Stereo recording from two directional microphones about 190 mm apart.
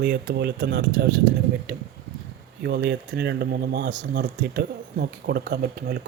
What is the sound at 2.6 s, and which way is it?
Speech, 60° right (ahead or behind).